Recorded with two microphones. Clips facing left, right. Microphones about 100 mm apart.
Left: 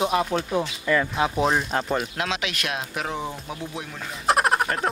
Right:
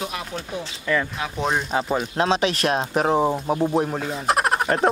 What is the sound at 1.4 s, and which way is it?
Speech, centre (ahead or behind).